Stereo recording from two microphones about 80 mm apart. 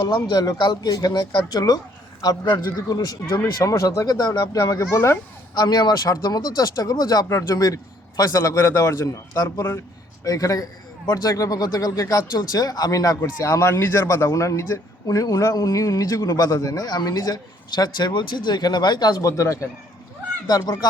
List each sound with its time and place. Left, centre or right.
0.1 s a man's voice: left
5.5 s a man's voice: left
7.3 s a man's voice: left
19.2 s a man's voice: left